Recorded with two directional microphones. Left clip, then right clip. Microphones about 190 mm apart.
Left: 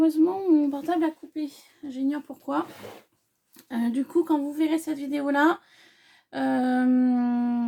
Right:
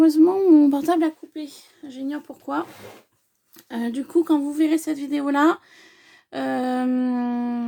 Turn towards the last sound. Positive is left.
turn(degrees=-40)  # may be behind; listen again after turning